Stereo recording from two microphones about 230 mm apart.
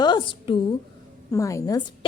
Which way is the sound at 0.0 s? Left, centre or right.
Left.